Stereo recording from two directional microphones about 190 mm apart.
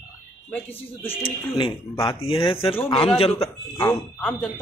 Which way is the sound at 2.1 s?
30° left (ahead or behind).